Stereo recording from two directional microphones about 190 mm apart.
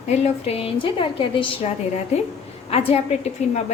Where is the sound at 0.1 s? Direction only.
30° left (ahead or behind).